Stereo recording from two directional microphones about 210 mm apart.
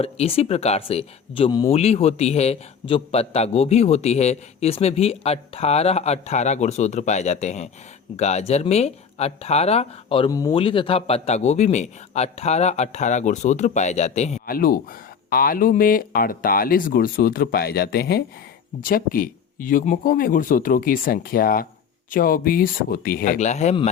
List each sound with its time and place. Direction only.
0.0 s speech: 30° left (ahead or behind)